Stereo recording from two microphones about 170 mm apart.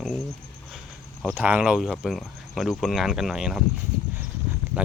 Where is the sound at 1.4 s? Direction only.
5° right (ahead or behind).